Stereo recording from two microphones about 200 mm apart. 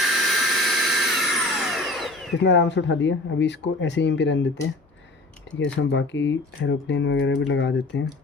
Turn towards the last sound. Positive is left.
turn(degrees=65)  # may be behind; listen again after turning